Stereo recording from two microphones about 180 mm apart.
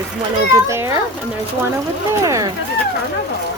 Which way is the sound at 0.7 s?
15° right (ahead or behind).